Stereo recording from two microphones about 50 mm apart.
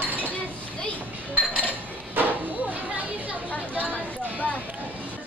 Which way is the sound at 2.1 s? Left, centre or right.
Right.